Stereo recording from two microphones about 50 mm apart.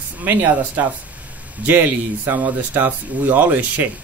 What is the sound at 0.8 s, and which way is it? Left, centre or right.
Speech, right.